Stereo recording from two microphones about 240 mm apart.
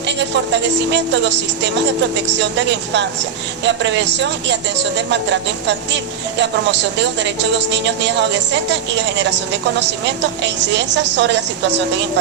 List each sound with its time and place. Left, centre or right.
0.0 s a woman's voice: right